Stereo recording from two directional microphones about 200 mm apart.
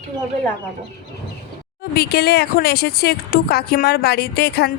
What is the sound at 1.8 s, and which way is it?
Speech, 50° left (ahead or behind).